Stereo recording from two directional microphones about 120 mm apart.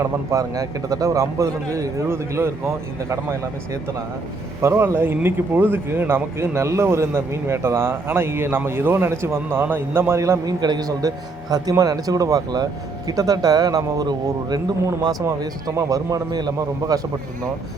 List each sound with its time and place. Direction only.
0.0 s a man's voice: 25° right (ahead or behind)